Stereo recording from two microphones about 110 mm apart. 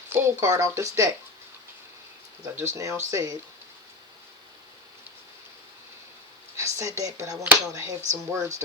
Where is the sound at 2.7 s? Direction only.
30° right (ahead or behind).